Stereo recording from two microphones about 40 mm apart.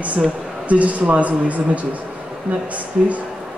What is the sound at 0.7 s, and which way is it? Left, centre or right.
Speech, right.